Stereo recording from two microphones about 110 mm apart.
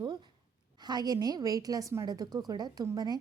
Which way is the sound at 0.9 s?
35° right (ahead or behind).